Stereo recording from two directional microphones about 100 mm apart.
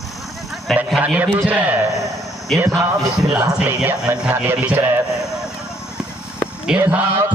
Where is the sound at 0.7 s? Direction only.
5° left (ahead or behind).